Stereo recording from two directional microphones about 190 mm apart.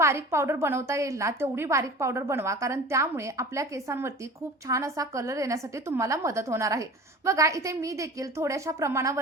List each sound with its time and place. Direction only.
0.0 s a woman's voice: 15° right (ahead or behind)